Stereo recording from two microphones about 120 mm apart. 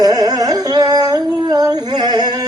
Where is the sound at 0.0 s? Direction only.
30° right (ahead or behind).